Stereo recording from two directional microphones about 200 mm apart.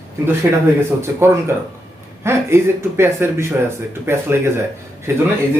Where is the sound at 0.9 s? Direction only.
15° right (ahead or behind).